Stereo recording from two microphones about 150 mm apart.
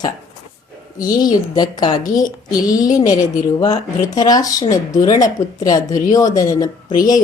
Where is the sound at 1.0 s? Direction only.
25° left (ahead or behind).